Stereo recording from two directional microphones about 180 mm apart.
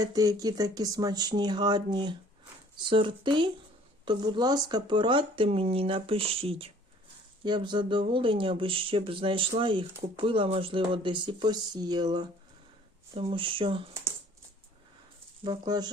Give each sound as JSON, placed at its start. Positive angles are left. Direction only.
{"t": 0.0, "sound": "speech", "side_deg": -20}
{"t": 15.4, "sound": "speech", "side_deg": -20}